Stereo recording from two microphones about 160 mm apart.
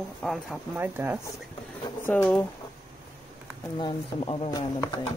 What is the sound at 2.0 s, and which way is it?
Speech, 10° left (ahead or behind).